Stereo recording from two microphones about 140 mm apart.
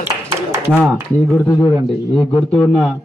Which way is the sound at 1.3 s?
15° left (ahead or behind).